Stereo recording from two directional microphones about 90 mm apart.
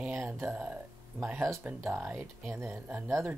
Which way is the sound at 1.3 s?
30° right (ahead or behind).